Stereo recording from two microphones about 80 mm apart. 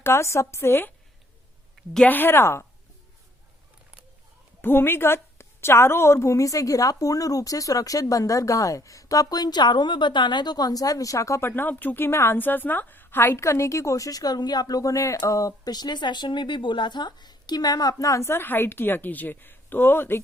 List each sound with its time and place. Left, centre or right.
0.0 s a woman's voice: left
2.0 s a woman's voice: left
4.6 s a woman's voice: left